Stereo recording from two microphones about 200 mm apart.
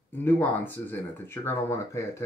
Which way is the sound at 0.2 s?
10° left (ahead or behind).